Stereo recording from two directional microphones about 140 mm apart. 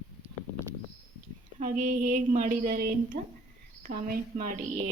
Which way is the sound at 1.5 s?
65° right (ahead or behind).